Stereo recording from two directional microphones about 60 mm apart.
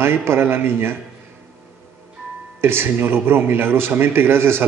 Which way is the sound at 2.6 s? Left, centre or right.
Right.